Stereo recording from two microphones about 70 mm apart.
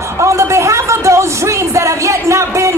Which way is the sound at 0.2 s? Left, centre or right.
Right.